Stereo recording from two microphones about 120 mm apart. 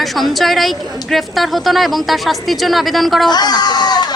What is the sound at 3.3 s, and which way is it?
Speech, 35° left (ahead or behind).